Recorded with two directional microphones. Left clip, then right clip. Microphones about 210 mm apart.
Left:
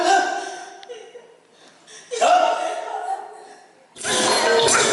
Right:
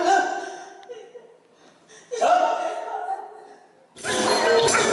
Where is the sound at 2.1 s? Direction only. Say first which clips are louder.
Left 3 dB; 10° right (ahead or behind).